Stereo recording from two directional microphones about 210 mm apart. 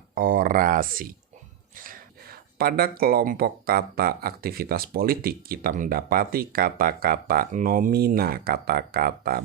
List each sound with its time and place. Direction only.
0.1 s speech: 40° right (ahead or behind)